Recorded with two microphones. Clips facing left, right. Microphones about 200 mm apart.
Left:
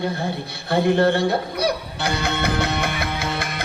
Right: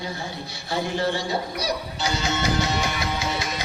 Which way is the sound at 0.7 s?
60° left (ahead or behind).